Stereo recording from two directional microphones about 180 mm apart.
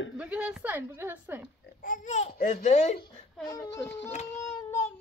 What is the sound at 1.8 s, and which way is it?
Speech, 50° left (ahead or behind).